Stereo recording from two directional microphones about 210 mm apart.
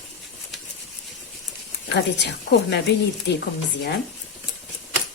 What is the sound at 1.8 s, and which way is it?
Speech, 55° left (ahead or behind).